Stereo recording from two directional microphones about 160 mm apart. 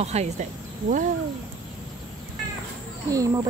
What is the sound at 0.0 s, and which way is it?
Speech, 45° right (ahead or behind).